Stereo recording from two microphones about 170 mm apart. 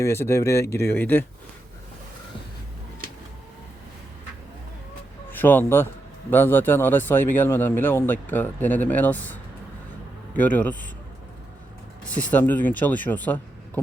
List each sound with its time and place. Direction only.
0.0 s speech: 15° left (ahead or behind)
5.3 s speech: 10° left (ahead or behind)
12.0 s speech: 10° left (ahead or behind)